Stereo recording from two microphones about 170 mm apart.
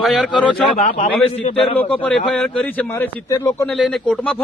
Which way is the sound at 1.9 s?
5° left (ahead or behind).